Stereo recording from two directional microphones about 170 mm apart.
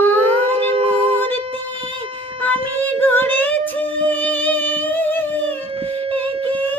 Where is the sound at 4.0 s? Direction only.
10° left (ahead or behind).